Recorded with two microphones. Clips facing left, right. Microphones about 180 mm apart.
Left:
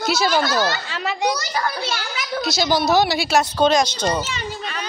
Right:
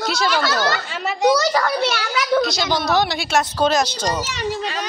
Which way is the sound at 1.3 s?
80° right.